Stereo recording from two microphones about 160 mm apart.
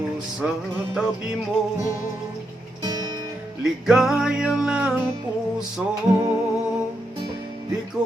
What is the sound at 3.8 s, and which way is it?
Music, 5° right (ahead or behind).